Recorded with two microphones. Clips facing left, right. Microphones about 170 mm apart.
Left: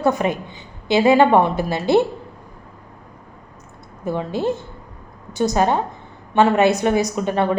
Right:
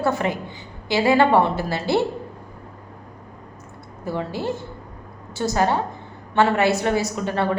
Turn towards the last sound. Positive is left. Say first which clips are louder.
# left 3 dB
turn(degrees=20)  # may be behind; listen again after turning